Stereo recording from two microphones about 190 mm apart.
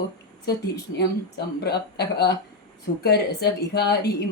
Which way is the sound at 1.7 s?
60° left (ahead or behind).